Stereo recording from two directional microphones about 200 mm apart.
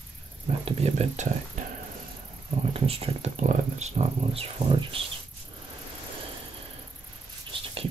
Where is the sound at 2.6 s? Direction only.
30° right (ahead or behind).